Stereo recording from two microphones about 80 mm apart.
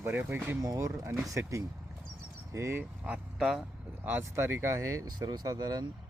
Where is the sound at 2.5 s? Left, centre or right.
Right.